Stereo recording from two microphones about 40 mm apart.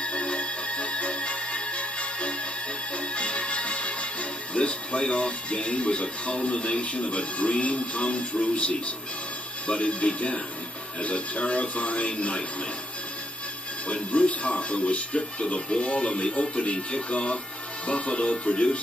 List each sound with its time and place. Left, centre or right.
0.0 s music: left
3.0 s speech: left
13.8 s speech: left